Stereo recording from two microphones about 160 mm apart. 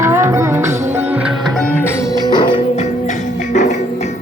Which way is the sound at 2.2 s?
30° left (ahead or behind).